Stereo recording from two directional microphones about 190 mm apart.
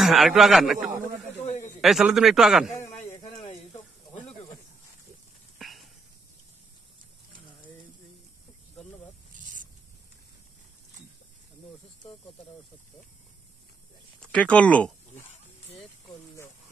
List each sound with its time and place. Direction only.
0.0 s a man's voice: centre (ahead or behind)
2.7 s a sound: 15° left (ahead or behind)
3.2 s snake: 30° left (ahead or behind)
5.6 s snake: centre (ahead or behind)
14.2 s speech: 5° left (ahead or behind)